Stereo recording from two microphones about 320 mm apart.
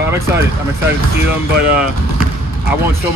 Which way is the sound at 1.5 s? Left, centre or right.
Left.